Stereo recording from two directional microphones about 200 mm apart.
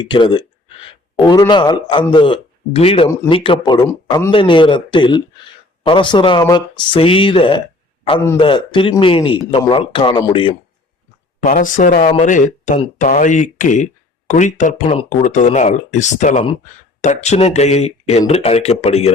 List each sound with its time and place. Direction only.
0.0 s a man's voice: 25° left (ahead or behind)
11.3 s speech: 40° left (ahead or behind)